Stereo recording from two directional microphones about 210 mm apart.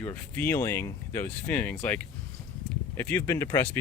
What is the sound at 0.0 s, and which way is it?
Speech, 10° left (ahead or behind).